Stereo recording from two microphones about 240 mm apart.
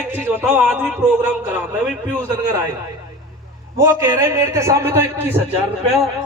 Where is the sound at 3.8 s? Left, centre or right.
Centre.